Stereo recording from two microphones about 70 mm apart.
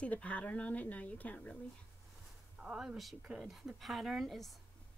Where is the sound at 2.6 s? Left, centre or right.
Centre.